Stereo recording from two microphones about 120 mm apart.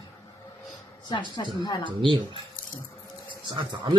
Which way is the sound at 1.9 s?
40° right (ahead or behind).